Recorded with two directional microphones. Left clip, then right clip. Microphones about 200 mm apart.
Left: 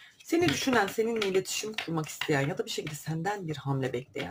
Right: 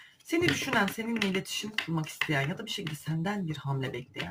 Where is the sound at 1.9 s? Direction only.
35° left (ahead or behind).